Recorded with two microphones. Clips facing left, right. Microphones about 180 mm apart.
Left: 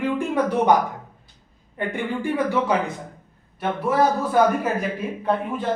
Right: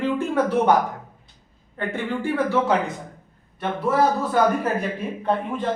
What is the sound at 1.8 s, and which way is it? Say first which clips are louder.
A man's voice: even; 15° left (ahead or behind).